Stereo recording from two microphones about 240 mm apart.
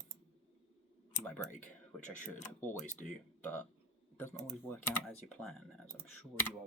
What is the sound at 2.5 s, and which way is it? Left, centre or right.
Speech, centre.